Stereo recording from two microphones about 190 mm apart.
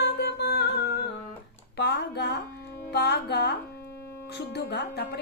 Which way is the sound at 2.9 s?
60° left (ahead or behind).